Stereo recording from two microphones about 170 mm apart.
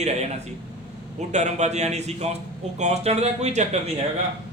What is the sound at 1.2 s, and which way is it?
A man's voice, 45° right (ahead or behind).